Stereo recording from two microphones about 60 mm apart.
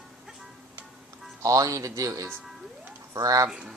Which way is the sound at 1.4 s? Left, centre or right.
Right.